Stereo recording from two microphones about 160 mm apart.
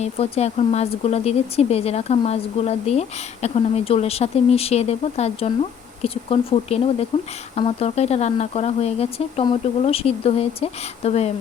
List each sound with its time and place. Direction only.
0.0 s speech: 40° left (ahead or behind)